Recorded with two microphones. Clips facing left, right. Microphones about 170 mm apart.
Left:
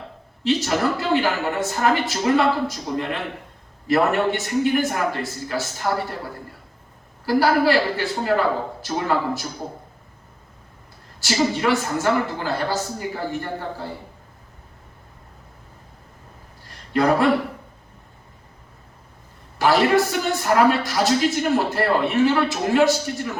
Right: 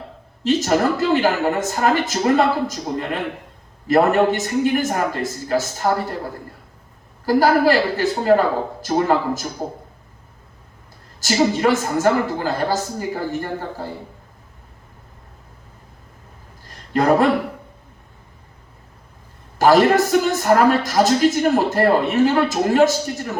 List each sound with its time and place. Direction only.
0.4 s a man's voice: 45° right (ahead or behind)
7.3 s a man's voice: 45° right (ahead or behind)
11.2 s a man's voice: 40° right (ahead or behind)
16.9 s a man's voice: 45° right (ahead or behind)
19.5 s a man's voice: 45° right (ahead or behind)